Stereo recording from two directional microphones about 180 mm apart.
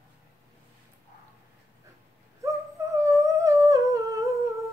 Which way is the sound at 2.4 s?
15° right (ahead or behind).